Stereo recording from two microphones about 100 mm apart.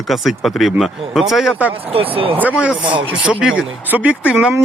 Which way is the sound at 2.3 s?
15° right (ahead or behind).